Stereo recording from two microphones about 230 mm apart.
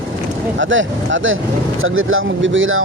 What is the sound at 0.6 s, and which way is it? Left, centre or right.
Speech, right.